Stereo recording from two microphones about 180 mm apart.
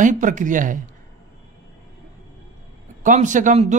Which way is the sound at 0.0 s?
45° right (ahead or behind).